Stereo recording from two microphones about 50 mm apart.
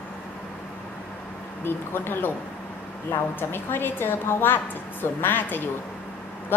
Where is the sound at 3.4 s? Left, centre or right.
Left.